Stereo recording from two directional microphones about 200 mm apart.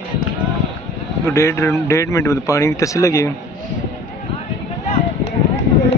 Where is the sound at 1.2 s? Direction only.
15° left (ahead or behind).